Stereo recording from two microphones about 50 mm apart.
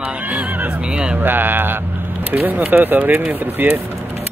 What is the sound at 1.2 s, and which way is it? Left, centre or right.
Mantra, right.